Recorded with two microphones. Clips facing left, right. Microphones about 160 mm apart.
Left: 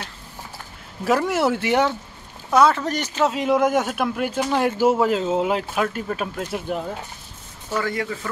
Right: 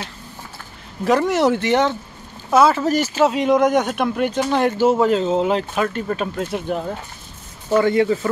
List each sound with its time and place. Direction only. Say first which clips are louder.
1.0 s speech: right 3 dB; 5° left (ahead or behind)
2.5 s speech: right 3 dB; 5° right (ahead or behind)
7.7 s speech: right 9 dB; 25° right (ahead or behind)